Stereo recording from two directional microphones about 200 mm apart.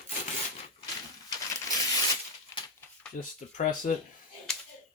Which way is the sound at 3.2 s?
40° left (ahead or behind).